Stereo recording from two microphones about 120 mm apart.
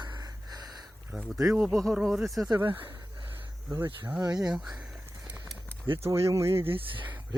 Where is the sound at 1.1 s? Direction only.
Centre (ahead or behind).